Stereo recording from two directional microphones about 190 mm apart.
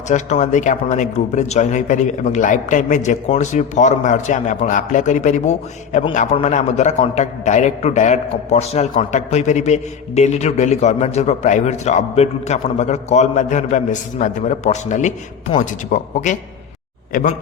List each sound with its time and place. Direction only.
0.1 s a man's voice: 40° left (ahead or behind)